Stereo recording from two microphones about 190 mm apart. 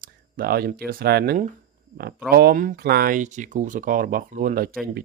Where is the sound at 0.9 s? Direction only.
55° right (ahead or behind).